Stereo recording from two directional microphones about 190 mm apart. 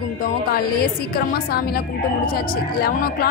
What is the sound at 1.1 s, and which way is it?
Speech, 55° left (ahead or behind).